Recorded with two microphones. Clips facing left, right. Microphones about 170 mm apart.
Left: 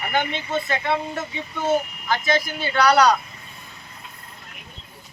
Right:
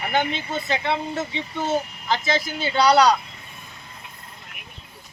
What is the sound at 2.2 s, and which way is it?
Speech, 25° right (ahead or behind).